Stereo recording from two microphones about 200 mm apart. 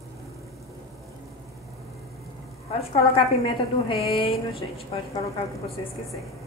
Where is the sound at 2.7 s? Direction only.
30° left (ahead or behind).